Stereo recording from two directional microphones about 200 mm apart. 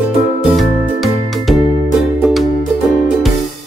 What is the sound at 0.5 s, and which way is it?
Music, centre (ahead or behind).